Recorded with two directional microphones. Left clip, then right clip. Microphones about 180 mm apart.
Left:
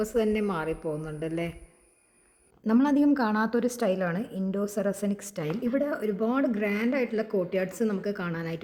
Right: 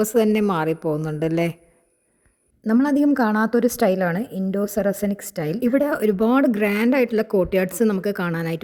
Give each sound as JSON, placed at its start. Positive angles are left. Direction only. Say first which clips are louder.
{"t": 0.0, "sound": "a woman's voice", "louder": "right 8 dB", "side_deg": -55}
{"t": 2.6, "sound": "a woman's voice", "louder": "right 5 dB", "side_deg": -25}
{"t": 5.6, "sound": "speech", "louder": "right 9 dB", "side_deg": -50}